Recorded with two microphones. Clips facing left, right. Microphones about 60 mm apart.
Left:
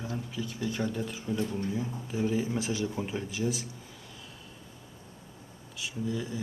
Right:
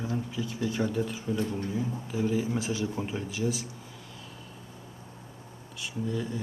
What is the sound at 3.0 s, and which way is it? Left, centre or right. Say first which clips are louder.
Speech: right 1 dB; centre.